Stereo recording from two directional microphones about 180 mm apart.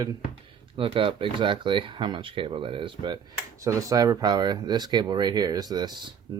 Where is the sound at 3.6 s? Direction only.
15° right (ahead or behind).